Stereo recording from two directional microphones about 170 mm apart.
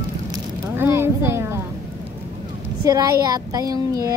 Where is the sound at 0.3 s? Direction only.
15° right (ahead or behind).